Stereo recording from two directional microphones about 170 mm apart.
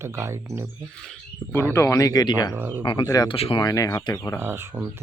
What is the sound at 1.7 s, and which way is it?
Speech, 15° left (ahead or behind).